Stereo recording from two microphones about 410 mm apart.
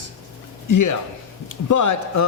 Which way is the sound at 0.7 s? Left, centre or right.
Left.